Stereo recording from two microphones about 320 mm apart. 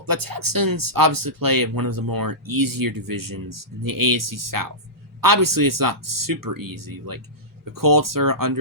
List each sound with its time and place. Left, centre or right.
0.0 s speech: right